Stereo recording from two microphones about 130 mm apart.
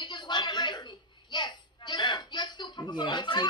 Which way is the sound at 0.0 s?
35° left (ahead or behind).